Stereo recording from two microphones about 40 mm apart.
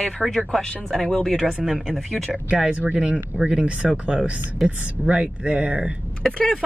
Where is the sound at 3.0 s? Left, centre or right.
Right.